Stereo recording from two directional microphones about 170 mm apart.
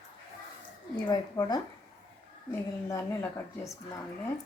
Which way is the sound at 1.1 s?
25° left (ahead or behind).